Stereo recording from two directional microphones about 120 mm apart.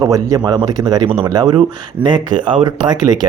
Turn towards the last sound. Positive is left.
turn(degrees=-35)  # may be behind; listen again after turning